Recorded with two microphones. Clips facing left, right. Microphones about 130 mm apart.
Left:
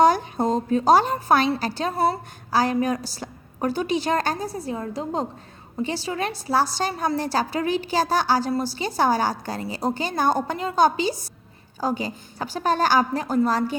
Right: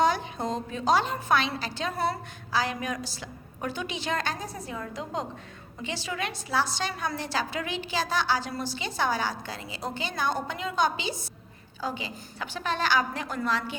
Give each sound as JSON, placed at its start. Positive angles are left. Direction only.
{"t": 0.0, "sound": "a woman's voice", "side_deg": 45}